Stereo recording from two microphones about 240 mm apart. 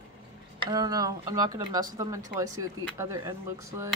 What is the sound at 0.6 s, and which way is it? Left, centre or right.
Speech, centre.